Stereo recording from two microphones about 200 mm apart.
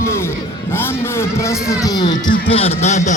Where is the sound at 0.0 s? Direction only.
15° left (ahead or behind).